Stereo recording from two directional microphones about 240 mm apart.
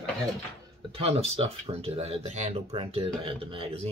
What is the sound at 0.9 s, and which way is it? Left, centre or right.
Speech, right.